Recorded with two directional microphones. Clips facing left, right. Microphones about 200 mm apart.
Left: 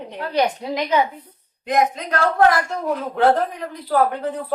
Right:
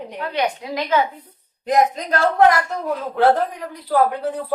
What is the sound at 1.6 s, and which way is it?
Speech, 35° right (ahead or behind).